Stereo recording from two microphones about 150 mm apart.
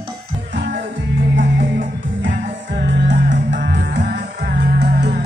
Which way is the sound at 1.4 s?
60° right (ahead or behind).